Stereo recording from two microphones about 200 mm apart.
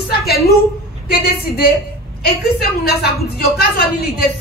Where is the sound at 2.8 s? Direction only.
50° left (ahead or behind).